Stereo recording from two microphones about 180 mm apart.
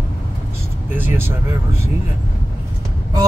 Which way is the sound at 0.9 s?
10° right (ahead or behind).